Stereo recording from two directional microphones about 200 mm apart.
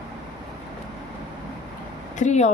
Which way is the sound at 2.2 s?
35° left (ahead or behind).